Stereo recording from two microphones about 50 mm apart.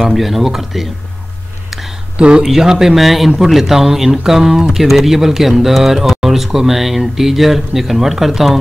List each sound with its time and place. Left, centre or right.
0.0 s speech: centre
1.7 s a sound: centre
2.1 s speech: centre
2.4 s speech: centre